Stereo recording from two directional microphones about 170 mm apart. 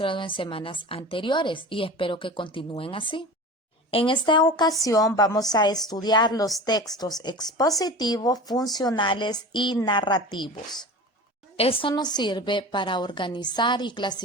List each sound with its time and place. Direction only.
0.0 s a woman's voice: 30° left (ahead or behind)
11.5 s a woman's voice: 35° left (ahead or behind)